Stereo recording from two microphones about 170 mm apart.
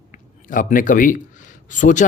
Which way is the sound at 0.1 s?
50° left (ahead or behind).